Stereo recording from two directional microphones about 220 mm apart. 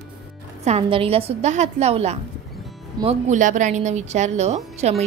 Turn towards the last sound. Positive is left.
turn(degrees=-30)  # may be behind; listen again after turning